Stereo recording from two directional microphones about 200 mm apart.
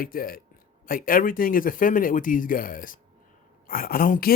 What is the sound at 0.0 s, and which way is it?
Speech, 45° left (ahead or behind).